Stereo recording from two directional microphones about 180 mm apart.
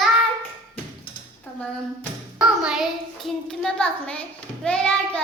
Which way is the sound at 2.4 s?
Centre (ahead or behind).